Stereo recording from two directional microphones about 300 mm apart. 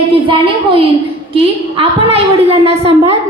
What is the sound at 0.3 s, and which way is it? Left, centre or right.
Speech, centre.